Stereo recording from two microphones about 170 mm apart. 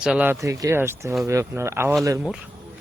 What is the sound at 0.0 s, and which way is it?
Speech, 5° right (ahead or behind).